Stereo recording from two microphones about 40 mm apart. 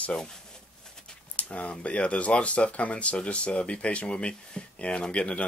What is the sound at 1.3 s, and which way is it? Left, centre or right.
Speech, left.